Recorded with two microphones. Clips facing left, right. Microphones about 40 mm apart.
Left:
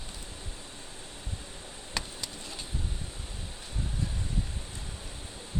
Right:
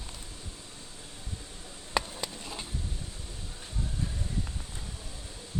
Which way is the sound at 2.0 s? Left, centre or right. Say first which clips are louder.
Right 6 dB; centre.